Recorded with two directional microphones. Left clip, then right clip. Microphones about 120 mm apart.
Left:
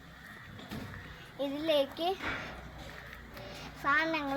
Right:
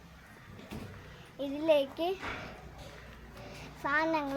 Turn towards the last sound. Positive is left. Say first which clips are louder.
# left 1 dB
turn(degrees=-30)  # may be behind; listen again after turning